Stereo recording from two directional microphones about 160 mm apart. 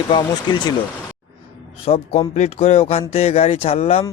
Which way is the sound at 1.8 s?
40° left (ahead or behind).